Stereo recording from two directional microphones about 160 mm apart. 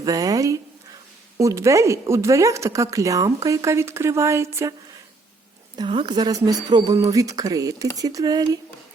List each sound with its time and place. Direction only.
0.0 s speech: 20° right (ahead or behind)
5.7 s speech: 30° right (ahead or behind)